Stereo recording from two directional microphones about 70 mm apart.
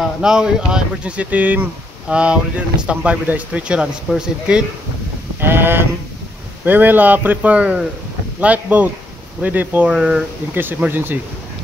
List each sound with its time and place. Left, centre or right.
0.2 s speech: centre
5.4 s a sound: right
6.6 s speech: right
9.8 s speech: centre
10.5 s speech: right